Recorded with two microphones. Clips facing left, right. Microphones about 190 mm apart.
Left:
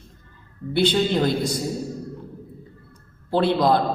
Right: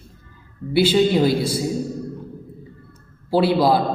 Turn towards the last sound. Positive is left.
turn(degrees=-5)  # may be behind; listen again after turning